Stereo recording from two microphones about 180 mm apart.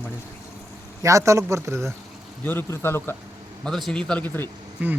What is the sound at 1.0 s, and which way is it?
Speech, 20° right (ahead or behind).